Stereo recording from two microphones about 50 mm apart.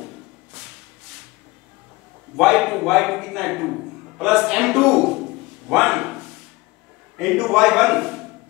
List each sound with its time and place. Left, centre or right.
2.3 s a man's voice: centre